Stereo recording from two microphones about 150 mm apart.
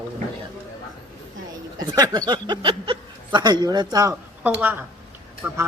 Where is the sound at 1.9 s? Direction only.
25° right (ahead or behind).